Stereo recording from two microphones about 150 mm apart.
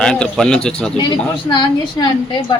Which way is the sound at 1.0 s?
30° left (ahead or behind).